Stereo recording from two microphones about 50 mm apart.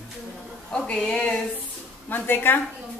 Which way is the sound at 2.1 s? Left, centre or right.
Left.